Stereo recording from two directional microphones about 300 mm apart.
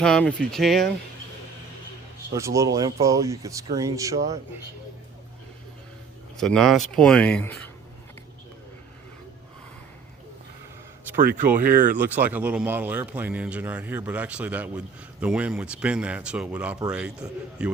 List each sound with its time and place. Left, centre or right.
0.0 s speech: centre
2.3 s speech: centre
6.3 s speech: centre
11.2 s speech: right
11.9 s speech: centre